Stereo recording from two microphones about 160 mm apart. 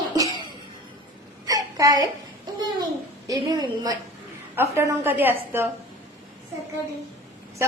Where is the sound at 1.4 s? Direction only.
20° right (ahead or behind).